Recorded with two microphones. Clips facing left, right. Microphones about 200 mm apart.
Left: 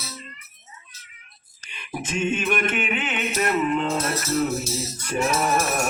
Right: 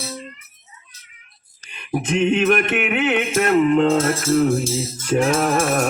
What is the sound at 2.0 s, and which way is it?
Music, 65° right (ahead or behind).